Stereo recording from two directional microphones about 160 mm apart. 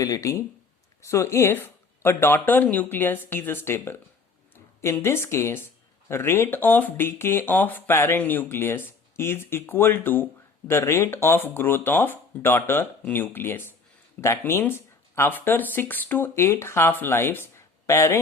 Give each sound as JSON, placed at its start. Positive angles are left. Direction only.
{"t": 0.0, "sound": "speech", "side_deg": 20}